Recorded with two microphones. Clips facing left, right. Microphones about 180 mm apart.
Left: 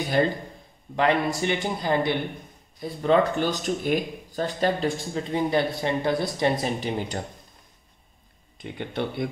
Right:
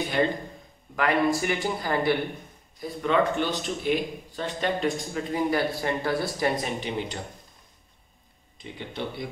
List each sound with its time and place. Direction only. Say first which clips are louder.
0.9 s speech: left 1 dB; 25° left (ahead or behind)
2.8 s speech: left 3 dB; 35° left (ahead or behind)
6.6 s speech: left 3 dB; 40° left (ahead or behind)
8.5 s speech: left 5 dB; 55° left (ahead or behind)